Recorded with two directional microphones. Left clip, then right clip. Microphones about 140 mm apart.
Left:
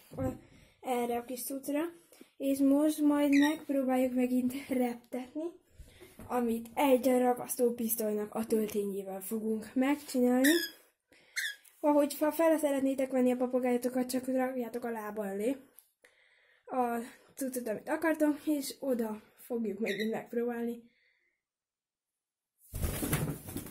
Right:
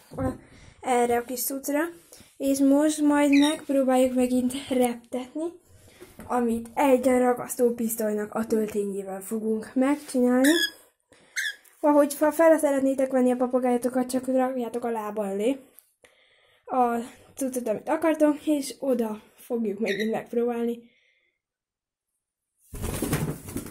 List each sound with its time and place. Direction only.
0.1 s a woman's voice: centre (ahead or behind)
8.5 s a woman's voice: 20° left (ahead or behind)
9.5 s speech: 5° left (ahead or behind)
11.8 s speech: centre (ahead or behind)